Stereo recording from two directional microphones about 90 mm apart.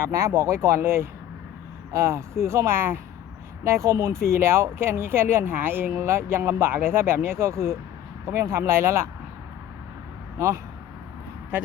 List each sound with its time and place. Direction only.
0.0 s speech: 35° right (ahead or behind)
10.3 s speech: 35° right (ahead or behind)